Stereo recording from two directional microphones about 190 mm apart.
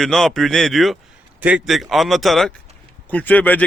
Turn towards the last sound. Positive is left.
turn(degrees=10)  # may be behind; listen again after turning